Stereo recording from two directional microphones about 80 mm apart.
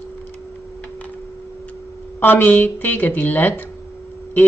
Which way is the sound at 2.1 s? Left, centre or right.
Left.